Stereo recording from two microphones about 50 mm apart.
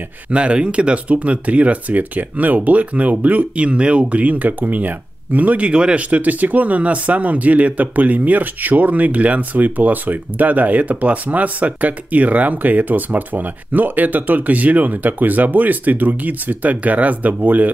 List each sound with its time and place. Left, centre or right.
0.3 s speech: right
5.7 s speech: centre
6.0 s speech: right